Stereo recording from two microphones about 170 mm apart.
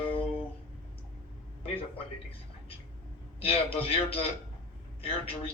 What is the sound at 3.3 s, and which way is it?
A man's voice, 35° left (ahead or behind).